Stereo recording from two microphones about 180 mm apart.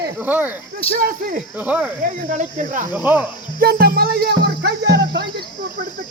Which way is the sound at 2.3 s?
45° right (ahead or behind).